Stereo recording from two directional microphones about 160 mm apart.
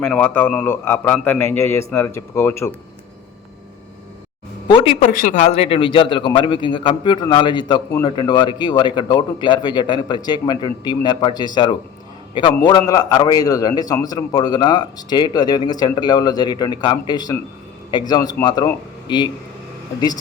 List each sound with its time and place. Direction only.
0.0 s a man's voice: 10° left (ahead or behind)
4.7 s a man's voice: 35° left (ahead or behind)
5.0 s speech: 55° left (ahead or behind)
5.5 s a man's voice: 40° left (ahead or behind)